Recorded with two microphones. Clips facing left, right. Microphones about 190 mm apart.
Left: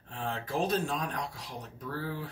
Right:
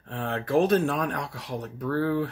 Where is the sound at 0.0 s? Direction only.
65° right (ahead or behind).